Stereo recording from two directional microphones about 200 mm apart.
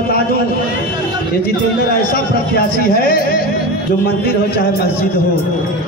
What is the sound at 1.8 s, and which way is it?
Speech, 45° left (ahead or behind).